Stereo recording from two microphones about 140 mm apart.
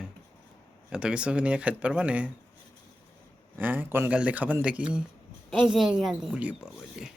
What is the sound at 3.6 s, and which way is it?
Speech, 15° right (ahead or behind).